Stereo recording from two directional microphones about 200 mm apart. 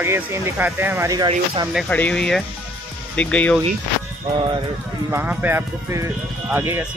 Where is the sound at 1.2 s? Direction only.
25° right (ahead or behind).